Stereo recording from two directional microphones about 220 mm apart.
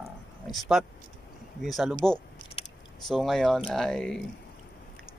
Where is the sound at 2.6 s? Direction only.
25° left (ahead or behind).